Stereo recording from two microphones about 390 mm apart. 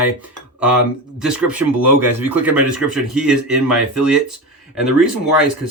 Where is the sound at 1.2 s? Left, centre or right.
Centre.